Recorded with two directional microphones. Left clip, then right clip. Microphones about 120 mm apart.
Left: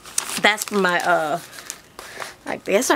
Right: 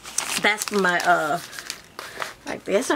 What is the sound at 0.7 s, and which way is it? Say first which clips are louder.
Speech: left 1 dB; 30° left (ahead or behind).